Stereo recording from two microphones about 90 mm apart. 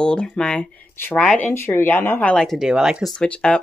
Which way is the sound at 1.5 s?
25° left (ahead or behind).